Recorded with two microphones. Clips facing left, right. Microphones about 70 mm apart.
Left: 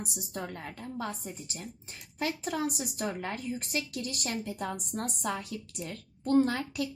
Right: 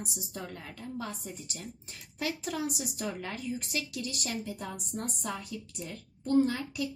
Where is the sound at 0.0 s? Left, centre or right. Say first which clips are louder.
Left 2 dB; left.